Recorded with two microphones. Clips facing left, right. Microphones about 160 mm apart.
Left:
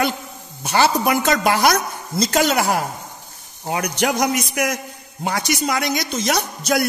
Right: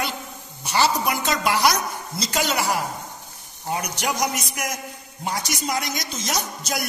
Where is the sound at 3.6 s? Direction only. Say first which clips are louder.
Left 5 dB; 75° left (ahead or behind).